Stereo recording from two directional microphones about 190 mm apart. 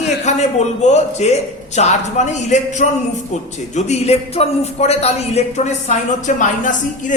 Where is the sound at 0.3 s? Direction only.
35° left (ahead or behind).